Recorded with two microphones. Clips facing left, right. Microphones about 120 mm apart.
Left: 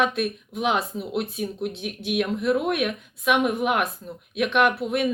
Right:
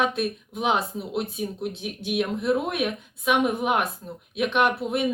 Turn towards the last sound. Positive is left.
turn(degrees=-25)  # may be behind; listen again after turning